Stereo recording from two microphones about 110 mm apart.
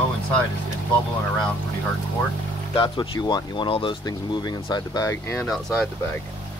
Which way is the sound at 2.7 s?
50° left (ahead or behind).